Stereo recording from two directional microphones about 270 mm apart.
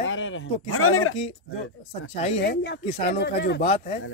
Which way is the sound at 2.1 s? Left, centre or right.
Left.